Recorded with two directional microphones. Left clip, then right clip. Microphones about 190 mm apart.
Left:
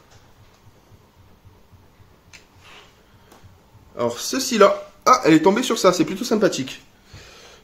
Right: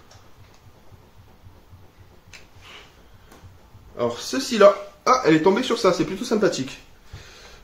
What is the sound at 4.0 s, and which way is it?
Speech, 55° left (ahead or behind).